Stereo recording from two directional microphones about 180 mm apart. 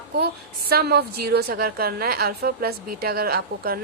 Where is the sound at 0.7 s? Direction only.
60° right (ahead or behind).